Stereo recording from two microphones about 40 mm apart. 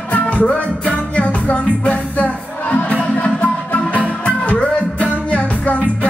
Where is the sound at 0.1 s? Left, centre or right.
Left.